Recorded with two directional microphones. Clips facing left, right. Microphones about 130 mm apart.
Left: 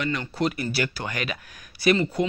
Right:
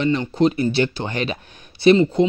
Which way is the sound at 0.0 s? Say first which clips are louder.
Right 8 dB; 25° right (ahead or behind).